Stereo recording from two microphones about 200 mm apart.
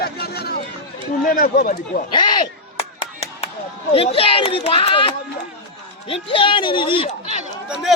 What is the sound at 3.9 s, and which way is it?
Speech, 30° left (ahead or behind).